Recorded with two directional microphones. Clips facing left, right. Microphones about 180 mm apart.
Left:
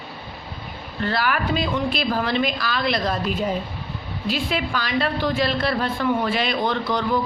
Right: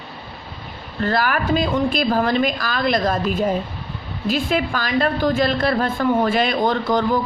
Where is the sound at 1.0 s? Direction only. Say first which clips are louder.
Right 3 dB; 45° right (ahead or behind).